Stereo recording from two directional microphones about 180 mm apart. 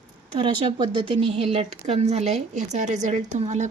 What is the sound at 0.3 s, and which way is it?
A woman's voice, 30° right (ahead or behind).